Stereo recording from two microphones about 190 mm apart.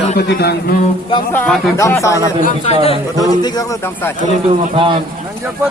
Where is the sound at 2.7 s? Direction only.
35° left (ahead or behind).